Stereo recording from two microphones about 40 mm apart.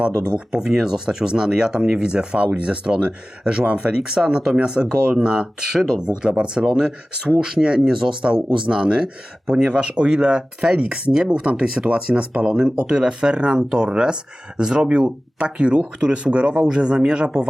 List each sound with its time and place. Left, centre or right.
0.0 s speech: right
0.6 s speech: centre
7.8 s speech: centre
8.2 s speech: right
11.1 s speech: centre